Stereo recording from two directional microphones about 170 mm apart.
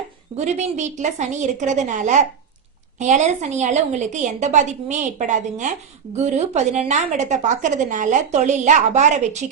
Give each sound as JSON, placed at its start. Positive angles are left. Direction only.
{"t": 0.3, "sound": "a woman's voice", "side_deg": -40}